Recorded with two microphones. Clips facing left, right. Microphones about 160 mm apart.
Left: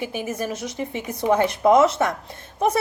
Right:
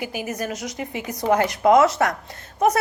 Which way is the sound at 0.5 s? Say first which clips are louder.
Left 1 dB; 30° left (ahead or behind).